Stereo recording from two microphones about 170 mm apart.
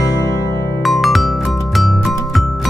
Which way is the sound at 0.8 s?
Centre (ahead or behind).